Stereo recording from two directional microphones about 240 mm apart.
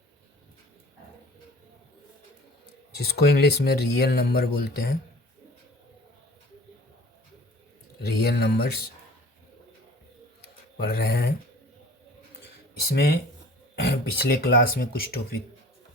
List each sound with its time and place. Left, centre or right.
3.0 s speech: left
8.0 s speech: left
10.8 s speech: left
12.9 s speech: left